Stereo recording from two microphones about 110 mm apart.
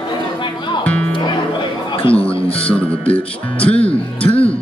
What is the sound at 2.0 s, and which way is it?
Music, 55° left (ahead or behind).